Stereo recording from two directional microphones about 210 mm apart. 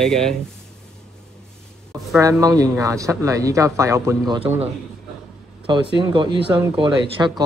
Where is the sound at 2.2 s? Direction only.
15° right (ahead or behind).